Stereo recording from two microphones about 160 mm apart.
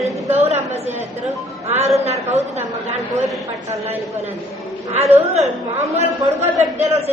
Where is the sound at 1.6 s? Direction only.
40° right (ahead or behind).